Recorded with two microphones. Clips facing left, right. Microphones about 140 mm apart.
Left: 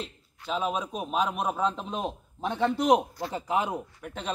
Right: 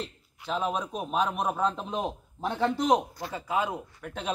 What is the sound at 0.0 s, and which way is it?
A man's voice, centre (ahead or behind).